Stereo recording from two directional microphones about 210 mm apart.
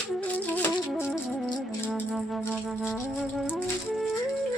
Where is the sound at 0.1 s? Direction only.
5° left (ahead or behind).